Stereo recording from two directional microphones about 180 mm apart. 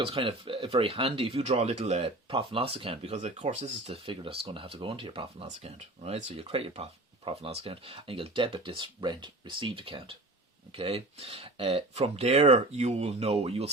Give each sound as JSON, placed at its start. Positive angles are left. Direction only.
{"t": 0.0, "sound": "speech", "side_deg": -30}